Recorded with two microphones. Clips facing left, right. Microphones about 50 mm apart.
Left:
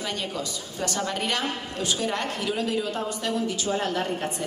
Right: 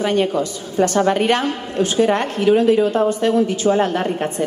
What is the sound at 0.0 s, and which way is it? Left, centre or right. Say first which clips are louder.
A woman's voice: right 13 dB; right.